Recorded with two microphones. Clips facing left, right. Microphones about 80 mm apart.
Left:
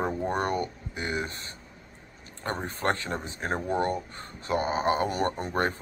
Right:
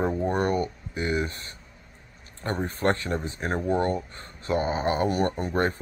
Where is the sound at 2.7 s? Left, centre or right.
Left.